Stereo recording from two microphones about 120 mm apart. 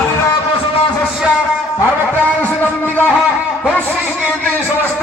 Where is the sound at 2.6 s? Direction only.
15° left (ahead or behind).